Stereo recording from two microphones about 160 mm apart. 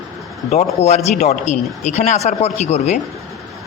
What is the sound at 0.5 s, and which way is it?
A man's voice, 40° left (ahead or behind).